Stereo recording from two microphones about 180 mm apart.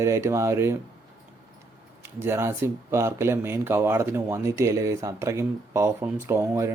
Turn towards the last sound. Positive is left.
turn(degrees=-15)  # may be behind; listen again after turning